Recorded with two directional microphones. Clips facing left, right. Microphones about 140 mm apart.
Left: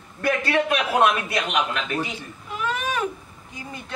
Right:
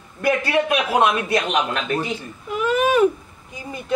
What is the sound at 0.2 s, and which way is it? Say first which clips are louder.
Speech: right 3 dB; 10° right (ahead or behind).